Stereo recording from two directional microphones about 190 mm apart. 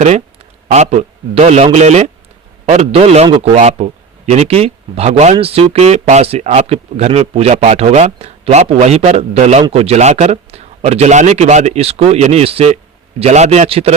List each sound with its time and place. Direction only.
0.7 s a man's voice: 35° right (ahead or behind)